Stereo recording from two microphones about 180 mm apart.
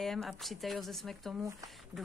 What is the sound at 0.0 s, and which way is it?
A woman's voice, centre (ahead or behind).